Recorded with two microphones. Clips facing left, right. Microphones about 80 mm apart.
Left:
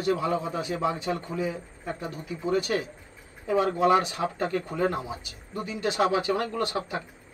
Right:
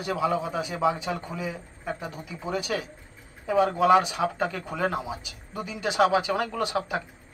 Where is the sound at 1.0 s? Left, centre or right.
Right.